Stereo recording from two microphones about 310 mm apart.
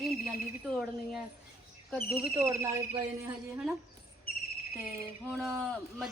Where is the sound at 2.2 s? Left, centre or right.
Centre.